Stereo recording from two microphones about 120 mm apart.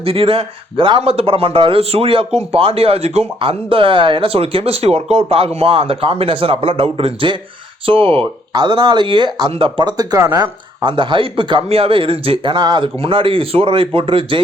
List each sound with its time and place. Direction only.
0.0 s speech: 50° right (ahead or behind)
8.5 s speech: 40° right (ahead or behind)